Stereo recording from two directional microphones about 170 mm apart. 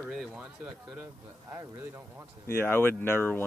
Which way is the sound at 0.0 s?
Centre (ahead or behind).